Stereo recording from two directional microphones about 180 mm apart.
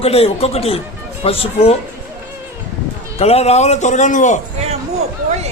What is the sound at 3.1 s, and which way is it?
A man's voice, 35° left (ahead or behind).